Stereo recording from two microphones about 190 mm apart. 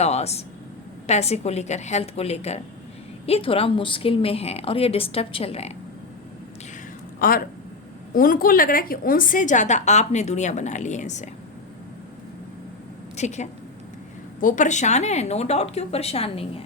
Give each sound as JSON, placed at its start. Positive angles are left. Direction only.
{"t": 0.0, "sound": "a woman's voice", "side_deg": 35}
{"t": 7.2, "sound": "a woman's voice", "side_deg": 50}
{"t": 13.1, "sound": "a woman's voice", "side_deg": 35}